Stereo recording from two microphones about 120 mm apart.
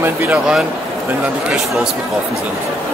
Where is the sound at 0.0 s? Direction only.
15° right (ahead or behind).